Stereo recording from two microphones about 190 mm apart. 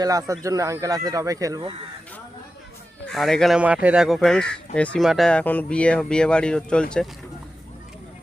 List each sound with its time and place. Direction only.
0.0 s speech: 20° right (ahead or behind)
3.1 s speech: centre (ahead or behind)